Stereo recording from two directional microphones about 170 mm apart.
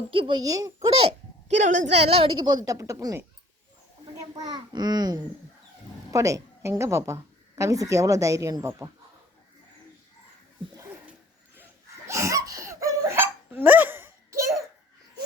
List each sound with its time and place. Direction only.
0.1 s a child's voice: 30° right (ahead or behind)
1.5 s a woman's voice: 45° right (ahead or behind); by 3.2 s 20° right (ahead or behind)
4.4 s a woman's voice: 25° right (ahead or behind)
12.0 s laughter: 15° right (ahead or behind)